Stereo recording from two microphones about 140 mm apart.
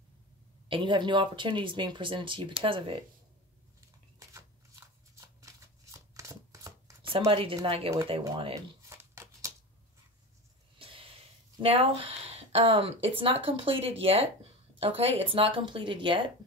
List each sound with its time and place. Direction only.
0.7 s speech: 35° right (ahead or behind)
4.3 s shuffling cards: 20° right (ahead or behind)
7.0 s speech: 40° right (ahead or behind)
8.8 s crumpling: 20° right (ahead or behind)
10.8 s sniff: 40° right (ahead or behind)
11.6 s speech: 45° right (ahead or behind)